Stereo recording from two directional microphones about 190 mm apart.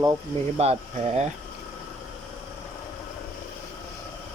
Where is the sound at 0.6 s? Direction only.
35° right (ahead or behind).